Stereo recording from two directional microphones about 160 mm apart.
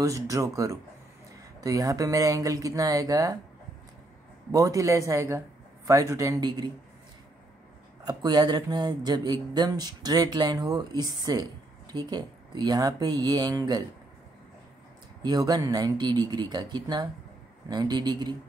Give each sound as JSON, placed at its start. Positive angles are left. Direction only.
{"t": 0.0, "sound": "speech", "side_deg": -20}
{"t": 4.5, "sound": "speech", "side_deg": -20}
{"t": 8.0, "sound": "speech", "side_deg": -25}
{"t": 15.2, "sound": "speech", "side_deg": -25}